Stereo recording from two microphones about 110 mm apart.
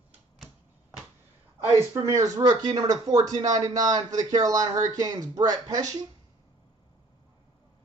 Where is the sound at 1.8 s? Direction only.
25° right (ahead or behind).